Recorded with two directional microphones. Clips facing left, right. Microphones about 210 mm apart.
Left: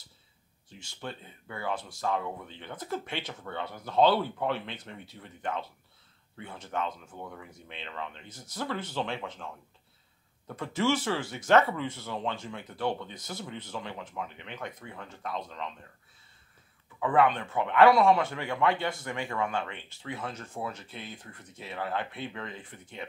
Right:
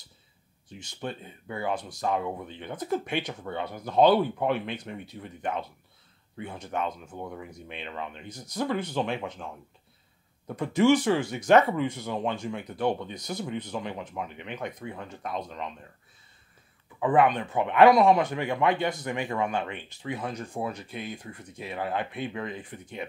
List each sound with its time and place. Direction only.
0.7 s a man's voice: 15° right (ahead or behind)
17.0 s a man's voice: 15° right (ahead or behind)